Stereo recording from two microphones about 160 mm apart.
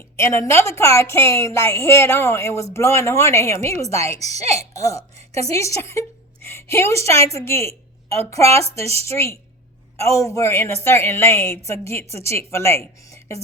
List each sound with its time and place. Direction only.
0.2 s a woman's voice: 15° left (ahead or behind)